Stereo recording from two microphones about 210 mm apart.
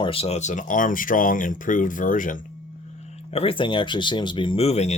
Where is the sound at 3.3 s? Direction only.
25° left (ahead or behind).